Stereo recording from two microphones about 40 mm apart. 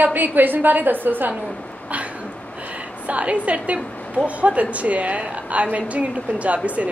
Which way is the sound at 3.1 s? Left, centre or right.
Right.